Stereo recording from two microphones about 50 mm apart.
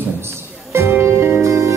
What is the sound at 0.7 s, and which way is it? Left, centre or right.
Music, right.